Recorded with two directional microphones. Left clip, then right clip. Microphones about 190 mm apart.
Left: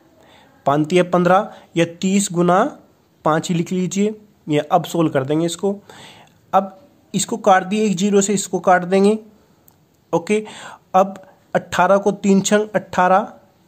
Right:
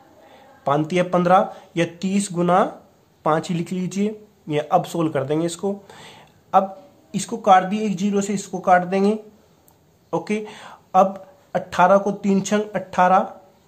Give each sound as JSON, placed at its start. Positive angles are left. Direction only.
{"t": 0.3, "sound": "speech", "side_deg": 45}